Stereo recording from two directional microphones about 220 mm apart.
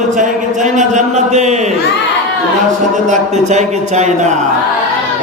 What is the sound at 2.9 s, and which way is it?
Speech, 35° right (ahead or behind).